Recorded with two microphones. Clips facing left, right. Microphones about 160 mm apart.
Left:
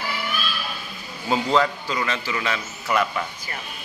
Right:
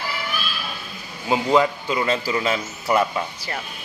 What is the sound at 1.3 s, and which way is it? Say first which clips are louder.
Speech: right 2 dB; 15° right (ahead or behind).